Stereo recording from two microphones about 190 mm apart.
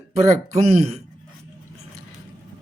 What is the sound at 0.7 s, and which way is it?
Speech, 35° right (ahead or behind).